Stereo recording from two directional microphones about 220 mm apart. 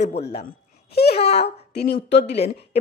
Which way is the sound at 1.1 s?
30° left (ahead or behind).